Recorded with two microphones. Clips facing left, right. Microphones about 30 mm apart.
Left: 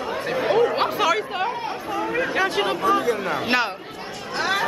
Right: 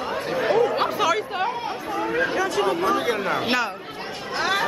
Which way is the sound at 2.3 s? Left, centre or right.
Left.